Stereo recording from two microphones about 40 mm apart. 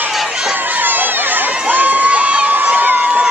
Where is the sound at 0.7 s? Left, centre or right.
Right.